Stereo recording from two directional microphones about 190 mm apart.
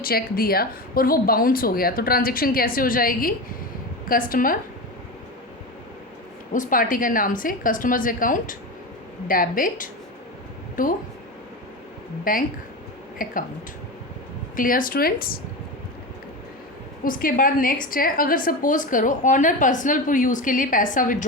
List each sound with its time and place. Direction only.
0.0 s a woman's voice: 50° left (ahead or behind)
6.5 s a woman's voice: 45° left (ahead or behind)
12.2 s a woman's voice: 45° left (ahead or behind)
14.5 s a woman's voice: 45° left (ahead or behind)
17.0 s a woman's voice: 50° left (ahead or behind)